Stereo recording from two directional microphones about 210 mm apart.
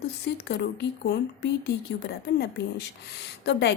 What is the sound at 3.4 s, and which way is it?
Speech, 55° left (ahead or behind).